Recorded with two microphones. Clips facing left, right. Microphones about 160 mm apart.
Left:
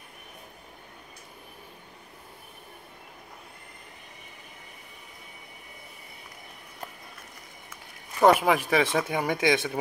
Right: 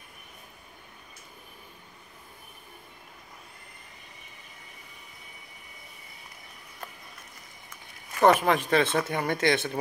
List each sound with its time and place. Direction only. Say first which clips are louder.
8.2 s speech: left 1 dB; 10° left (ahead or behind)